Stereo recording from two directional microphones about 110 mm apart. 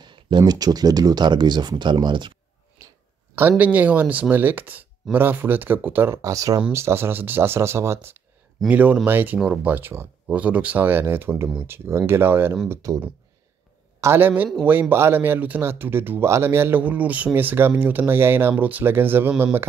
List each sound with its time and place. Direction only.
0.0 s speech: 45° right (ahead or behind)
3.3 s speech: 15° right (ahead or behind)
14.0 s speech: 20° right (ahead or behind)